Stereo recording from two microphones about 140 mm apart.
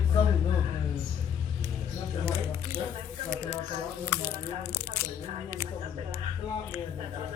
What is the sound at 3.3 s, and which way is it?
Speech, 20° right (ahead or behind).